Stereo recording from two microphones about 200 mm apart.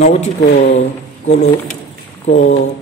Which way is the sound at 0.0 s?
35° left (ahead or behind).